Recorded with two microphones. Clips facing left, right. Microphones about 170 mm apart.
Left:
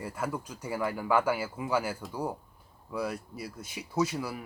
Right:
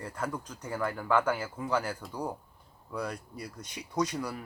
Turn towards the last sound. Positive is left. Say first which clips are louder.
# left 1 dB
turn(degrees=5)  # may be behind; listen again after turning